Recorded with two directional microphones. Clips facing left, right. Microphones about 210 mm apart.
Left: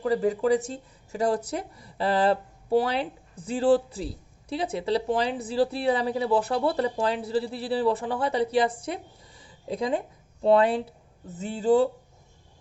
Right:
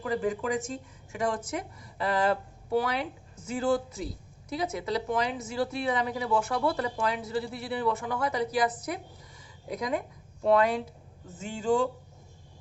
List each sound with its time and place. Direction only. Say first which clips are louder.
0.0 s speech: left 6 dB; 35° left (ahead or behind)